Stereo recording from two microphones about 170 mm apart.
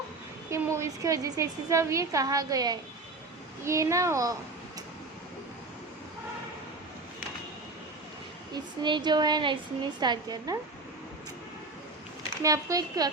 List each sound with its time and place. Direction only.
0.5 s a woman's voice: 15° right (ahead or behind)
8.5 s a woman's voice: 25° right (ahead or behind)
12.4 s a woman's voice: 20° right (ahead or behind)